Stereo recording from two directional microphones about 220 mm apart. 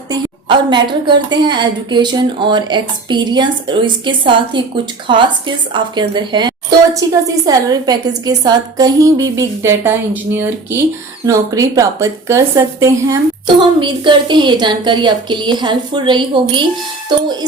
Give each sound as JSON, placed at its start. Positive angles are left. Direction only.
{"t": 0.1, "sound": "a woman's voice", "side_deg": -20}